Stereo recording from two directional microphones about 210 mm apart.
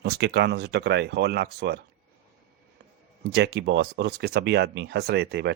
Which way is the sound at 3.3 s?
50° right (ahead or behind).